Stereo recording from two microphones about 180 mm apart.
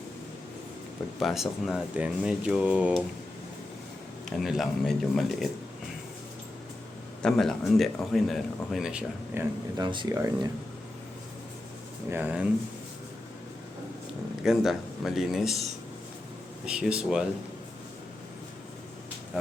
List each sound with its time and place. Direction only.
1.2 s a man's voice: centre (ahead or behind)
4.3 s a man's voice: centre (ahead or behind)
7.2 s a man's voice: 5° left (ahead or behind)
9.8 s speech: 25° right (ahead or behind)
12.1 s speech: 10° right (ahead or behind)
14.4 s a man's voice: centre (ahead or behind)
16.6 s a man's voice: 5° right (ahead or behind)